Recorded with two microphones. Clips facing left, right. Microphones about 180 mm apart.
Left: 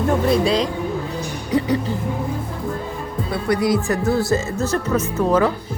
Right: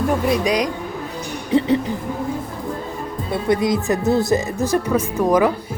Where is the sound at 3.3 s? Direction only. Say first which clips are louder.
Right 1 dB; 20° right (ahead or behind).